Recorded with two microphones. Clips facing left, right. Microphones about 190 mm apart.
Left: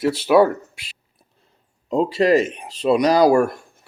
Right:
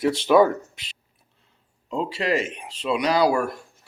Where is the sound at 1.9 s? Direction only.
40° left (ahead or behind).